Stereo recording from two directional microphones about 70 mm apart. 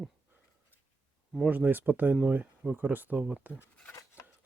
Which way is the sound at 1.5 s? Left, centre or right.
Right.